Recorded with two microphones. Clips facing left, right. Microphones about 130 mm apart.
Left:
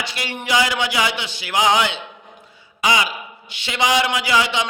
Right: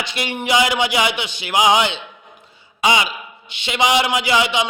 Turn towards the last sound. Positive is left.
turn(degrees=-15)  # may be behind; listen again after turning